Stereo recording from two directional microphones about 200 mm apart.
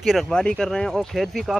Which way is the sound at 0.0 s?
Centre (ahead or behind).